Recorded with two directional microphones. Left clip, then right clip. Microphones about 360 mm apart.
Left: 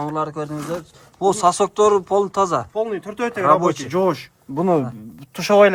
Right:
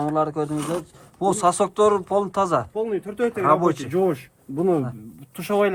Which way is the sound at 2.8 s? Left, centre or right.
Centre.